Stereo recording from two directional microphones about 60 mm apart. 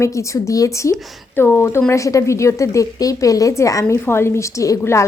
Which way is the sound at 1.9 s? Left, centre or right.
Left.